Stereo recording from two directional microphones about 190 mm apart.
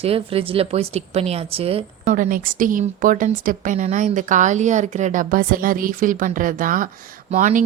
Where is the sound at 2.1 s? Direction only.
45° right (ahead or behind).